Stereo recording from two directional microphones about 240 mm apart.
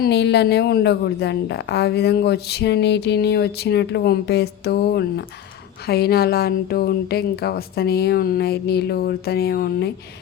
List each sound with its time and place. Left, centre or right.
0.0 s a woman's voice: left